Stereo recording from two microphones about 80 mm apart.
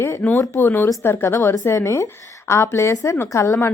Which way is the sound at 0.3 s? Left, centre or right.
Left.